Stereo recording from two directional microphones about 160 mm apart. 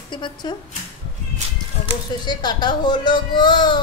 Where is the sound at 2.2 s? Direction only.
25° left (ahead or behind).